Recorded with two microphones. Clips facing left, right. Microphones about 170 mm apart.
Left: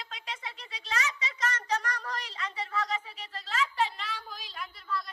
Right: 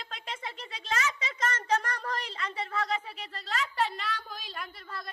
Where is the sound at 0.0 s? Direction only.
50° right (ahead or behind).